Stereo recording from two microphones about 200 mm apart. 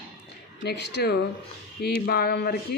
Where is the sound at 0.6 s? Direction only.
55° left (ahead or behind).